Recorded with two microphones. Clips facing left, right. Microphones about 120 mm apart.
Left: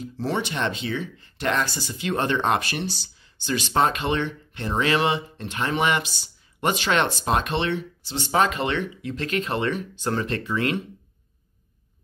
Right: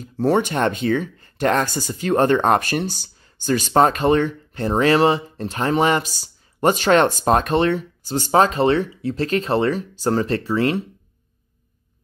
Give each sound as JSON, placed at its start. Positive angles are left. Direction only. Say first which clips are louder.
{"t": 0.0, "sound": "speech", "louder": "right 8 dB", "side_deg": -45}